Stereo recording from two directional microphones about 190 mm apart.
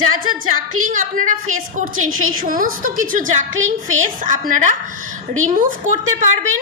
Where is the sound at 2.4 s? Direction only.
45° right (ahead or behind).